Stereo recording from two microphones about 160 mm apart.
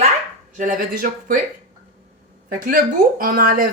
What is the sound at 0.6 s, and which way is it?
Speech, 60° right (ahead or behind).